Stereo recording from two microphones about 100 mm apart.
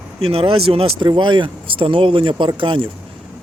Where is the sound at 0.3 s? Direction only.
70° right (ahead or behind).